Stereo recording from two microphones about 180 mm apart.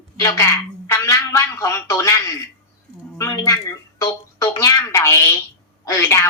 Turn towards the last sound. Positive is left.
turn(degrees=15)  # may be behind; listen again after turning